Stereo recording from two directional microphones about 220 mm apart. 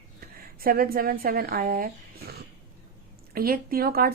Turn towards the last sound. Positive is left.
turn(degrees=-45)  # may be behind; listen again after turning